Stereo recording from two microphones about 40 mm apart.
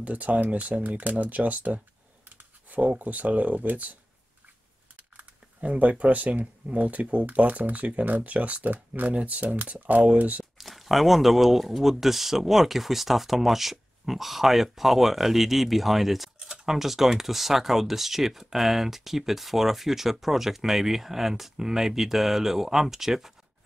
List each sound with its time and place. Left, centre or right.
0.0 s speech: right
2.2 s clicking: right
3.0 s speech: right
10.6 s speech: centre
16.3 s speech: centre